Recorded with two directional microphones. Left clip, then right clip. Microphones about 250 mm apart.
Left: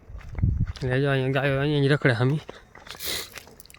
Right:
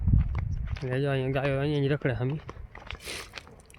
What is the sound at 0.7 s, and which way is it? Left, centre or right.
Speech, centre.